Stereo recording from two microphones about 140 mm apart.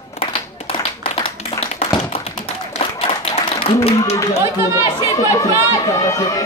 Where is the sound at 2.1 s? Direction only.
45° left (ahead or behind).